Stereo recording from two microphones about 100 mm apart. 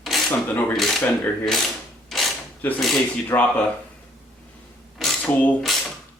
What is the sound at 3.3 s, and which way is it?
Speech, 30° left (ahead or behind).